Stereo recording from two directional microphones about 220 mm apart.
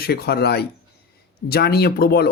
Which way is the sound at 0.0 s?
45° left (ahead or behind).